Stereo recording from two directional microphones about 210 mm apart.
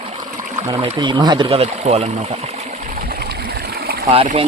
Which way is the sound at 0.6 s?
20° right (ahead or behind).